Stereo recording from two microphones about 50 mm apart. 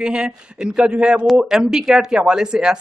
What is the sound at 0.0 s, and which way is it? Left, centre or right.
A man's voice, centre.